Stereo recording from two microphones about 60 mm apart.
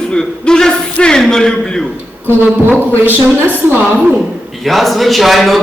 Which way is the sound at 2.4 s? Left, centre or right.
Right.